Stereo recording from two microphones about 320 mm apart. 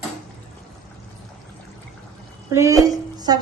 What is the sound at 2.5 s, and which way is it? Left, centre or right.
Speech, centre.